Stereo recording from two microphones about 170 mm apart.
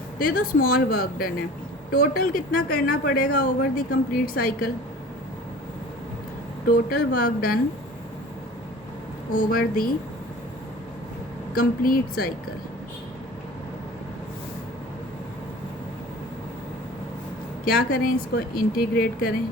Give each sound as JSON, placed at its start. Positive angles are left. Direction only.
{"t": 0.2, "sound": "speech", "side_deg": 55}
{"t": 6.7, "sound": "speech", "side_deg": 55}
{"t": 9.3, "sound": "speech", "side_deg": 55}
{"t": 11.5, "sound": "speech", "side_deg": 60}
{"t": 17.9, "sound": "speech", "side_deg": 60}